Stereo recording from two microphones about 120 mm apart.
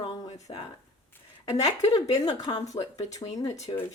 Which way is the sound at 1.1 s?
15° left (ahead or behind).